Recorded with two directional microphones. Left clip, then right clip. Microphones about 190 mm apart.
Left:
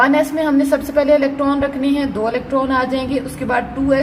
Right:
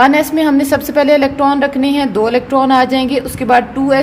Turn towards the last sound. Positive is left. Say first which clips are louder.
# right 6 dB
turn(degrees=-55)  # may be behind; listen again after turning